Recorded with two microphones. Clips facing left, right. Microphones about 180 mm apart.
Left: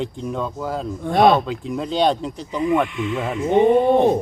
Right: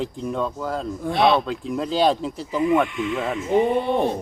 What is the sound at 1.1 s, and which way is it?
Speech, 50° left (ahead or behind).